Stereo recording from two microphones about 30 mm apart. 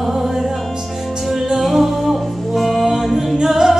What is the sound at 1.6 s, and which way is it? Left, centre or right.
Music, centre.